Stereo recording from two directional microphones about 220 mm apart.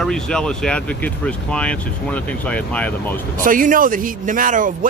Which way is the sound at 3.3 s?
40° right (ahead or behind).